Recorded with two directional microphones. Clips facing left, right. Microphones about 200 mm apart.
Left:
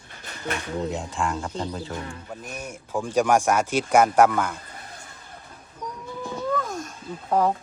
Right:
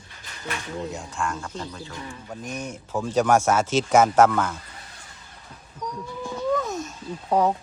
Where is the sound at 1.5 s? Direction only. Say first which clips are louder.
Left 4 dB; 30° left (ahead or behind).